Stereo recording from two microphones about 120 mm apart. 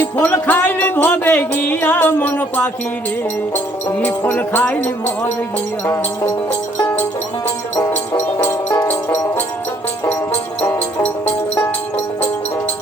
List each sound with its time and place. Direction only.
0.0 s music: 15° left (ahead or behind)
4.0 s a sound: 15° left (ahead or behind)
6.7 s music: 15° left (ahead or behind)
10.7 s music: 15° left (ahead or behind)